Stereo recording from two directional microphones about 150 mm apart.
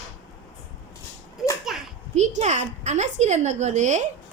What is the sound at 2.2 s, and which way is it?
A woman's voice, 50° right (ahead or behind).